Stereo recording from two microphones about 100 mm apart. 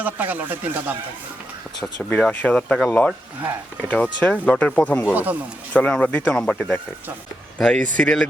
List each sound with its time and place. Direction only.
0.0 s speech: 15° right (ahead or behind)
2.0 s speech: 15° left (ahead or behind)
3.8 s speech: 15° left (ahead or behind)
5.0 s speech: 15° right (ahead or behind)
5.7 s speech: 10° left (ahead or behind)